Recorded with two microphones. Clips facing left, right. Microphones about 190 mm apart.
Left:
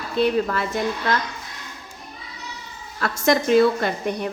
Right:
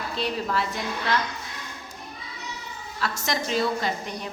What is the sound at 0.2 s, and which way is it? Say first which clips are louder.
Speech: left 8 dB; 50° left (ahead or behind).